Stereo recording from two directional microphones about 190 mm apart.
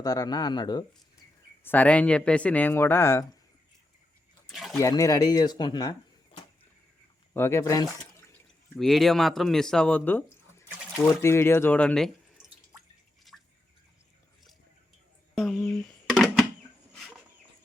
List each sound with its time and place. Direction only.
0.0 s speech: 20° left (ahead or behind)
1.6 s speech: 10° left (ahead or behind)
4.4 s a sound: centre (ahead or behind)
4.8 s speech: 15° left (ahead or behind)
13.3 s drip: centre (ahead or behind)
15.4 s a sound: centre (ahead or behind)